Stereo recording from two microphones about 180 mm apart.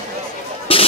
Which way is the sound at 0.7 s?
30° left (ahead or behind).